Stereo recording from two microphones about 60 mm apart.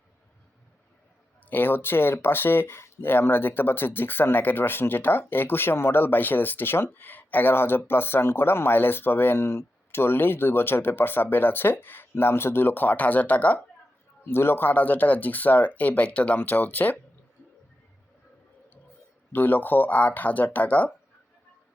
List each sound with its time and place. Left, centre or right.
1.5 s speech: left
14.3 s speech: left
19.3 s speech: left